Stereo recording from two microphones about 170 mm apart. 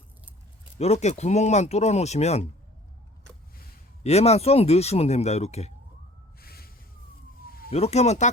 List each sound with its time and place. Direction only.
0.8 s speech: 40° left (ahead or behind)
4.0 s speech: 40° left (ahead or behind)
6.4 s a sound: 65° left (ahead or behind)
7.4 s police car: 60° left (ahead or behind)
7.7 s speech: 40° left (ahead or behind)